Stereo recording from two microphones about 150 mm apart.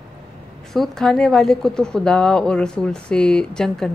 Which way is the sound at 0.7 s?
Centre (ahead or behind).